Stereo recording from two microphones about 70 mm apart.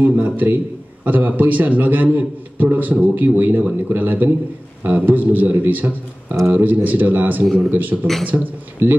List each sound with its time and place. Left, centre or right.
0.0 s a man's voice: right